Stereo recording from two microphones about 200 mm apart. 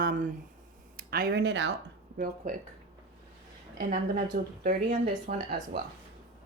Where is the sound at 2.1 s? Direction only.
40° right (ahead or behind).